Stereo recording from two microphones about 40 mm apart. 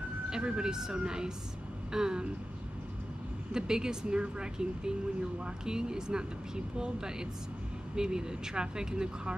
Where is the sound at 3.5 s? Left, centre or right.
Centre.